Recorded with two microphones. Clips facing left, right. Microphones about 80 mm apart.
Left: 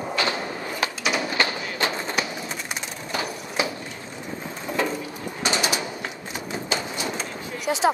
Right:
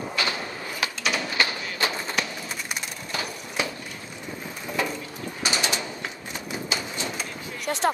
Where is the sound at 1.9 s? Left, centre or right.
Left.